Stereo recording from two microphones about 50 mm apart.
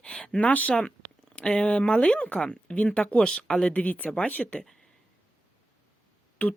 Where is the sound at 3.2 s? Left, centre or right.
Centre.